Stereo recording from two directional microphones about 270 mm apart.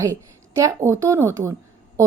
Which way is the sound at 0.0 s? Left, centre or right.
Centre.